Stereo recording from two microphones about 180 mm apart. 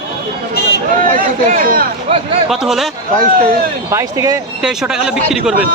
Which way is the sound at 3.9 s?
15° right (ahead or behind).